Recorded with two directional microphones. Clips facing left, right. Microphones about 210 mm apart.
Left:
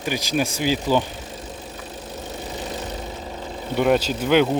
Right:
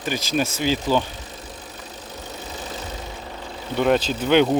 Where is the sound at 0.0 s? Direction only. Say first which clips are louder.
Even; 15° left (ahead or behind).